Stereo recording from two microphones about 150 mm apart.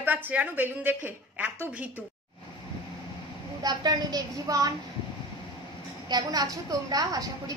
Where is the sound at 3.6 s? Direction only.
25° right (ahead or behind).